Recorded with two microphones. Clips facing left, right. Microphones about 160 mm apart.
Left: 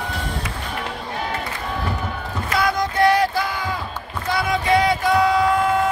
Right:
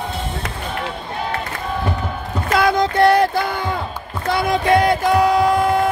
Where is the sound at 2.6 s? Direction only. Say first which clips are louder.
Right 4 dB; 55° right (ahead or behind).